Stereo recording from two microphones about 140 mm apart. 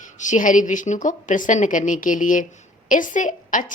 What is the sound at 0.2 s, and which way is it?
A woman's voice, 65° left (ahead or behind).